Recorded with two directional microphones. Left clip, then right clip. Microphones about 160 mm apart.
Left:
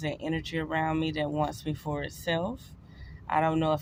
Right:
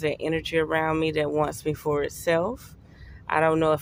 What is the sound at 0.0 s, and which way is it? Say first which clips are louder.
Speech: right 7 dB; 40° right (ahead or behind).